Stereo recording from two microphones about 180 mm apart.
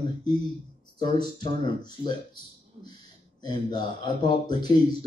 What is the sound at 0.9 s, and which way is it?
Speech, 25° left (ahead or behind).